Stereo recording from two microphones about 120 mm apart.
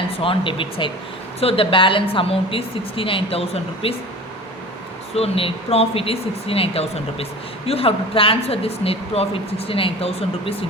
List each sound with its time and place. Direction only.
0.1 s a woman's voice: 50° left (ahead or behind)
5.1 s a woman's voice: 55° left (ahead or behind)